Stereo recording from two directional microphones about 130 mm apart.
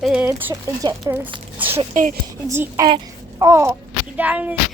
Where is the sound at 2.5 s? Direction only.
20° right (ahead or behind).